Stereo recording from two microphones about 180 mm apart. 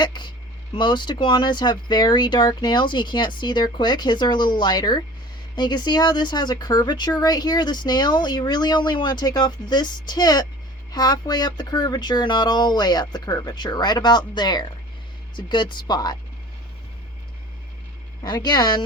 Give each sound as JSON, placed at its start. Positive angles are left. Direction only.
{"t": 0.0, "sound": "speech", "side_deg": 25}
{"t": 18.2, "sound": "speech", "side_deg": 25}